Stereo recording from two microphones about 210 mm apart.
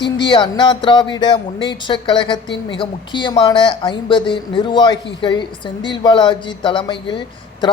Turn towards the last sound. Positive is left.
turn(degrees=20)  # may be behind; listen again after turning